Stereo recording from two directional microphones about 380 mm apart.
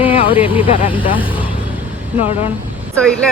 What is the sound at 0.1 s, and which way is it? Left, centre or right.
Vehicle, centre.